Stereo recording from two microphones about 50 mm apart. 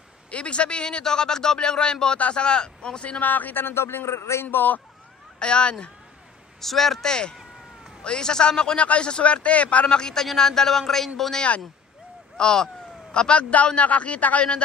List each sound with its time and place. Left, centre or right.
0.3 s a man's voice: left
4.5 s a man's voice: left
5.4 s speech: left
6.6 s a man's voice: centre; by 9.8 s left
9.8 s a man's voice: centre